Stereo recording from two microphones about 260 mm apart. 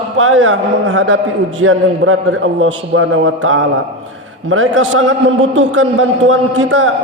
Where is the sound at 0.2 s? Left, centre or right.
Right.